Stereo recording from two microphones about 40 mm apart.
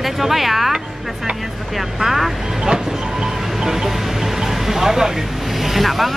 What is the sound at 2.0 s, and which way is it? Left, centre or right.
Speech, centre.